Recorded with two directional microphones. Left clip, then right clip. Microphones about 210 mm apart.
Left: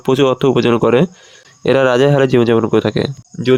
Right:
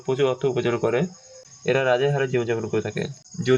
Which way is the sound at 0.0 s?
50° left (ahead or behind).